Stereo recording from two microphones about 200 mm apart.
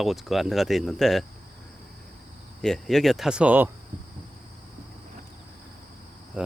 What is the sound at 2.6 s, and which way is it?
Speech, centre (ahead or behind).